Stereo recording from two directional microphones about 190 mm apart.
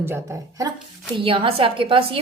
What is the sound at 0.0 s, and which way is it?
Speech, 15° right (ahead or behind).